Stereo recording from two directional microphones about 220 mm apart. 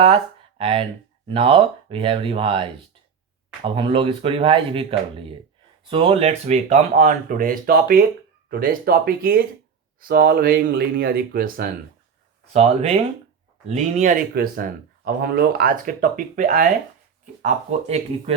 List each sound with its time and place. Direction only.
0.6 s speech: 25° right (ahead or behind); by 11.7 s 45° right (ahead or behind)
12.5 s speech: 30° right (ahead or behind)